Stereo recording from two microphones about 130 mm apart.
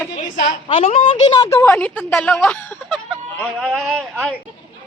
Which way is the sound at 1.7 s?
10° left (ahead or behind).